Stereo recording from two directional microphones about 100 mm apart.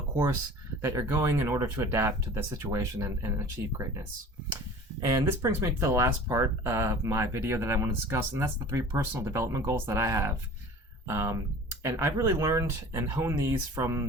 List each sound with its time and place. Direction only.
0.8 s speech: 25° right (ahead or behind)
5.5 s speech: 25° right (ahead or behind)